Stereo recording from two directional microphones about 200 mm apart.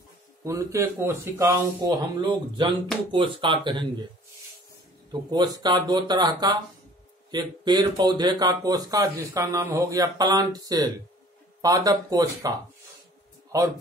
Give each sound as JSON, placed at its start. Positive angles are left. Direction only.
{"t": 0.4, "sound": "speech", "side_deg": -15}
{"t": 5.3, "sound": "speech", "side_deg": -20}